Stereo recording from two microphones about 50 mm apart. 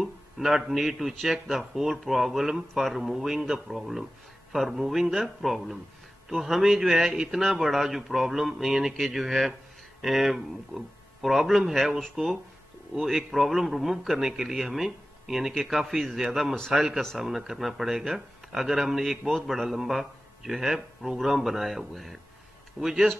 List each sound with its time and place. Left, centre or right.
0.0 s a man's voice: centre